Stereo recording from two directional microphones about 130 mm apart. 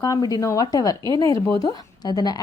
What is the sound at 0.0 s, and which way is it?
A woman's voice, 25° left (ahead or behind).